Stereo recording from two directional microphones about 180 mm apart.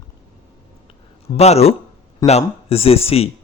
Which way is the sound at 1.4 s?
35° left (ahead or behind).